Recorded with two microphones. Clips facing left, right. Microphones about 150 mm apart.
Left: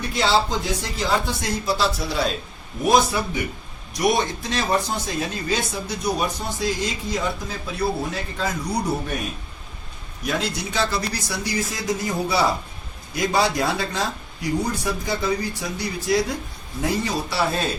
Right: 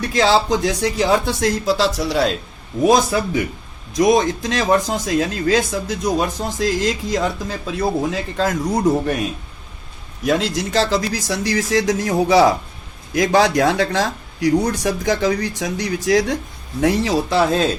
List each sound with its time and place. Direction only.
0.0 s speech: 90° right
4.0 s speech: 90° right